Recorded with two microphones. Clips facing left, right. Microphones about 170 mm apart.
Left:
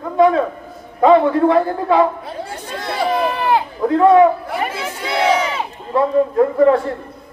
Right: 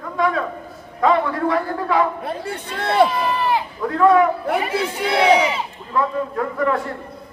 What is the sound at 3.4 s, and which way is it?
Run, 55° left (ahead or behind).